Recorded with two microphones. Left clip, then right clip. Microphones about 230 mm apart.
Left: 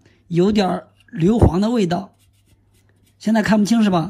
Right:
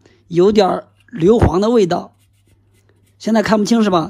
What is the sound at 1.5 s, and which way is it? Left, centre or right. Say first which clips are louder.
Speech: right 6 dB; right.